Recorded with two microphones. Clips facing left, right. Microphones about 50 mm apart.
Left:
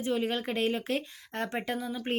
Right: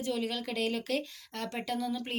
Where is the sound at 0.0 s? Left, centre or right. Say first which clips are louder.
Left 3 dB; left.